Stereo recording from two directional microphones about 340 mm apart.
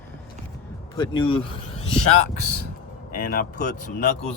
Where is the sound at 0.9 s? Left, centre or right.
Centre.